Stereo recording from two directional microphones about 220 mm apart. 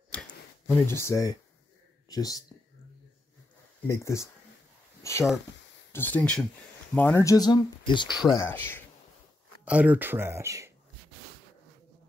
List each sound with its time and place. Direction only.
0.1 s a sound: 10° left (ahead or behind)
2.0 s speech: 15° left (ahead or behind)
3.8 s speech: 15° left (ahead or behind)
9.7 s speech: 5° right (ahead or behind)